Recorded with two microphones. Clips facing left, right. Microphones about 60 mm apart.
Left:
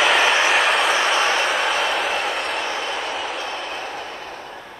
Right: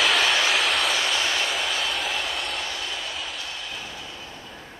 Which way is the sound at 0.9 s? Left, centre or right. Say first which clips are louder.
Left 6 dB; left.